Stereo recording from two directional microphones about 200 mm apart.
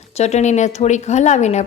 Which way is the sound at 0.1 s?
35° left (ahead or behind).